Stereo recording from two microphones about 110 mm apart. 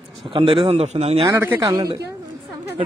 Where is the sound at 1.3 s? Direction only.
20° right (ahead or behind).